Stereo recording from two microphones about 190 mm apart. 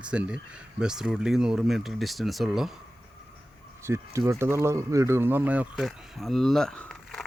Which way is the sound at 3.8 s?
15° right (ahead or behind).